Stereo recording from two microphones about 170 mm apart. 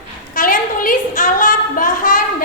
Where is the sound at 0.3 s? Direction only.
55° left (ahead or behind).